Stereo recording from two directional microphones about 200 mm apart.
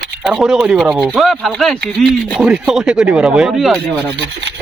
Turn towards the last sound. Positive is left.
turn(degrees=-5)  # may be behind; listen again after turning